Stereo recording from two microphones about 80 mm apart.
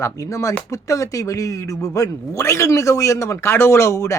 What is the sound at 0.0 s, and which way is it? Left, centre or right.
A man's voice, left.